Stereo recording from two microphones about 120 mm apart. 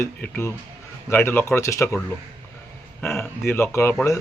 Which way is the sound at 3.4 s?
20° left (ahead or behind).